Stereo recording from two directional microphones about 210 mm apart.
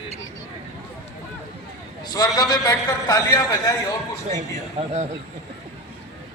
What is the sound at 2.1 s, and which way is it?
A man's voice, 20° left (ahead or behind).